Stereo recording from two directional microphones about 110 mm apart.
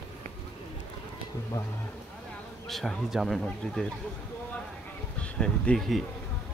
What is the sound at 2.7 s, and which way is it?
Speech, centre (ahead or behind).